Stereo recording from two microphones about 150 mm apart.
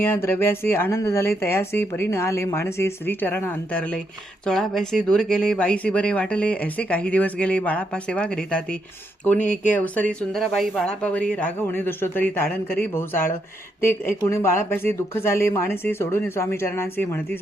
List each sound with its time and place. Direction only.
0.0 s speech: 15° left (ahead or behind)